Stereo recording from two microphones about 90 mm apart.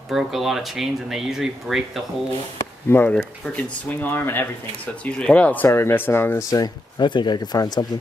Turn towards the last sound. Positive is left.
turn(degrees=50)  # may be behind; listen again after turning